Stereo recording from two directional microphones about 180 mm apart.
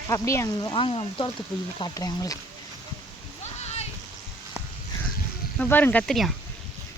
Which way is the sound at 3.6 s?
35° left (ahead or behind).